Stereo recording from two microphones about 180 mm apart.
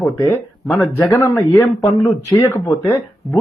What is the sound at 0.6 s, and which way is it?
Speech, centre (ahead or behind).